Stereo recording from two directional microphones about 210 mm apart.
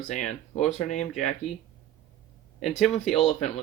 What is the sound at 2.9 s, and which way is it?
Speech, 30° left (ahead or behind).